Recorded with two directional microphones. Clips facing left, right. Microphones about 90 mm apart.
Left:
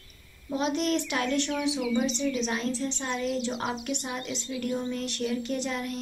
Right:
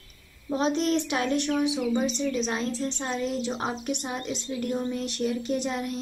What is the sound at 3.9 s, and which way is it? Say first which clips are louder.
Speech: right 2 dB; 25° right (ahead or behind).